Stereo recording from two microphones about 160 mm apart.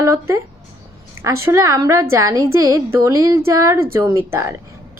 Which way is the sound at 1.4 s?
20° right (ahead or behind).